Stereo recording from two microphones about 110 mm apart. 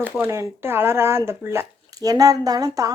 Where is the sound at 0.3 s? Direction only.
25° right (ahead or behind).